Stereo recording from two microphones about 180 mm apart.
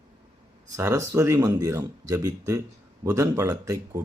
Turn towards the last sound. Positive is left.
turn(degrees=-20)  # may be behind; listen again after turning